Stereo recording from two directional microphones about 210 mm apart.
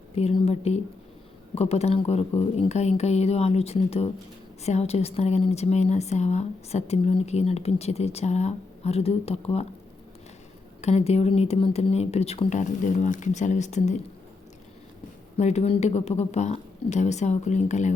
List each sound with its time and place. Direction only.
0.2 s a woman's voice: 30° left (ahead or behind)
10.8 s a woman's voice: 30° left (ahead or behind)
15.4 s a woman's voice: 30° left (ahead or behind)